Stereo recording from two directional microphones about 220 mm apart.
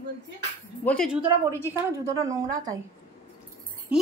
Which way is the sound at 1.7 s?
15° right (ahead or behind).